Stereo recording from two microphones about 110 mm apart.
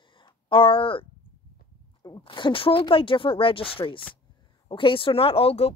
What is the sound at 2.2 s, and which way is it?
Speech, 50° left (ahead or behind).